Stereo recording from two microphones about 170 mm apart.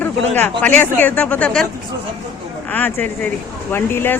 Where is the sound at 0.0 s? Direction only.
10° left (ahead or behind).